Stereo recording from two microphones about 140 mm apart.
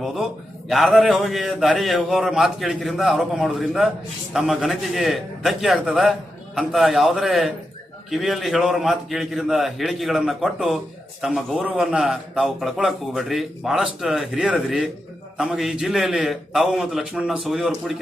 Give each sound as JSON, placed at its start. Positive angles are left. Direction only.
{"t": 0.7, "sound": "a man's voice", "side_deg": 0}